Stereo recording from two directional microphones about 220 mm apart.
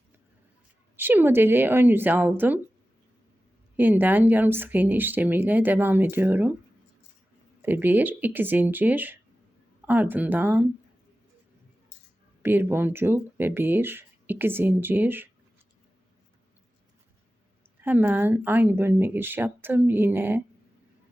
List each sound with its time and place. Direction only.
0.9 s speech: 10° right (ahead or behind)
3.8 s speech: 10° right (ahead or behind)
7.6 s speech: 10° right (ahead or behind)
12.4 s speech: 10° right (ahead or behind)
17.7 s speech: 10° right (ahead or behind)